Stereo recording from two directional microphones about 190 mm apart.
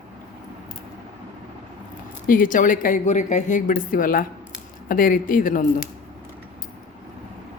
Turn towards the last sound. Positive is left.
turn(degrees=45)  # may be behind; listen again after turning